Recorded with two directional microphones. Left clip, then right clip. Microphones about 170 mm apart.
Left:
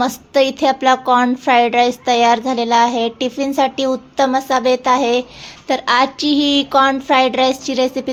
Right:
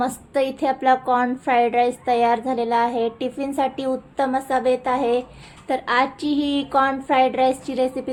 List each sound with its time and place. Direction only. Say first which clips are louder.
0.0 s a woman's voice: left 7 dB; 25° left (ahead or behind)